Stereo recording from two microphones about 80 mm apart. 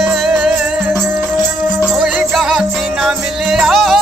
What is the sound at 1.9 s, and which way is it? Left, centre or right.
Music, centre.